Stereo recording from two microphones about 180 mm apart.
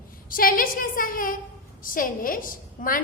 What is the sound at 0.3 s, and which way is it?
A woman's voice, 50° left (ahead or behind).